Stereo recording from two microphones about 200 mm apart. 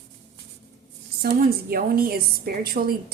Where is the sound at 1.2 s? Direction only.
50° right (ahead or behind).